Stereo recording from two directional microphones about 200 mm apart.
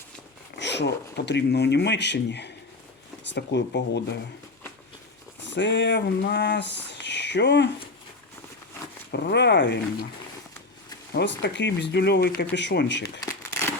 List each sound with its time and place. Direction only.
0.5 s speech: 60° left (ahead or behind)
5.4 s speech: 65° left (ahead or behind)
9.1 s speech: 55° left (ahead or behind)
11.1 s speech: 60° left (ahead or behind)
13.2 s a sound: 15° left (ahead or behind)